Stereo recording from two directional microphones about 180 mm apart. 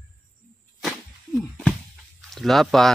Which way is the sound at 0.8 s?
5° left (ahead or behind).